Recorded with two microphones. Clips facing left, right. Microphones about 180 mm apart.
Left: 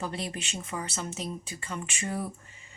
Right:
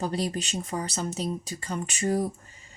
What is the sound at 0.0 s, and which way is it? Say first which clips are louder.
A woman's voice: right 6 dB; 35° right (ahead or behind).